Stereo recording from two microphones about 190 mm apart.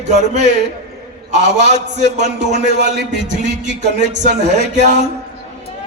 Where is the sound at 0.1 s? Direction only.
40° right (ahead or behind).